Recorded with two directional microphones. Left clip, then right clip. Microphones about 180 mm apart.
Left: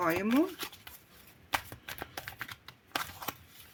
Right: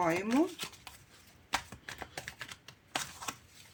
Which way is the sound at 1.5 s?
20° left (ahead or behind).